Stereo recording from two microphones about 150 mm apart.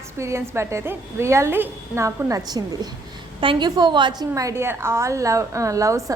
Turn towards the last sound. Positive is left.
turn(degrees=-20)  # may be behind; listen again after turning